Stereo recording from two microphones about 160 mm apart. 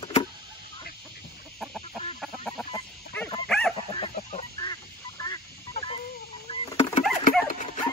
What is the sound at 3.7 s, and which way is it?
Chicken, 35° left (ahead or behind).